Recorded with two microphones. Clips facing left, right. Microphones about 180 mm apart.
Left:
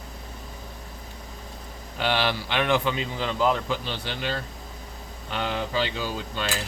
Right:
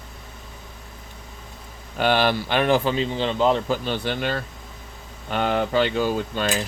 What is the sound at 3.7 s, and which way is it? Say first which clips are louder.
Speech: right 6 dB; 50° right (ahead or behind).